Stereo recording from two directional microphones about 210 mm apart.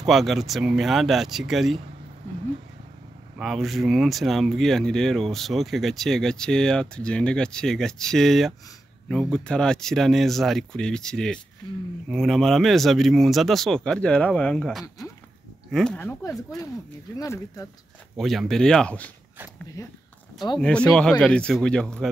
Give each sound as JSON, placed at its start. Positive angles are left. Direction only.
{"t": 0.0, "sound": "speech", "side_deg": 0}
{"t": 3.3, "sound": "speech", "side_deg": 0}
{"t": 18.1, "sound": "speech", "side_deg": 0}
{"t": 20.5, "sound": "speech", "side_deg": 5}